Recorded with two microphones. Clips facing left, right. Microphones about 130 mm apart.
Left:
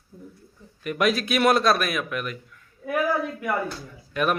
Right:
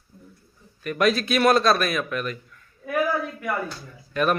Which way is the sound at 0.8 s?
10° left (ahead or behind).